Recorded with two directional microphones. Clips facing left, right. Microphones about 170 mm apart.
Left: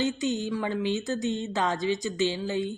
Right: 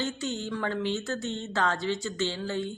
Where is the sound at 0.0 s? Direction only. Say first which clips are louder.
Left 5 dB; 15° left (ahead or behind).